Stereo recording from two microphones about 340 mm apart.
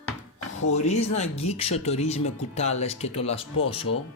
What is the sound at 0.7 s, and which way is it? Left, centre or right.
Speech, centre.